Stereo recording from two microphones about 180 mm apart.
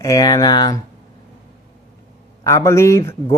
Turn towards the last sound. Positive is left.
turn(degrees=15)  # may be behind; listen again after turning